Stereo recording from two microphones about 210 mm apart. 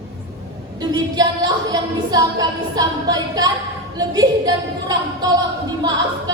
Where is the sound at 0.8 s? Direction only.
20° right (ahead or behind).